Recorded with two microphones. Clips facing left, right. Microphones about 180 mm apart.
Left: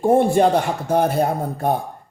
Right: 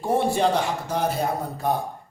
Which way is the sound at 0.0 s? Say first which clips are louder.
Left 6 dB; 50° left (ahead or behind).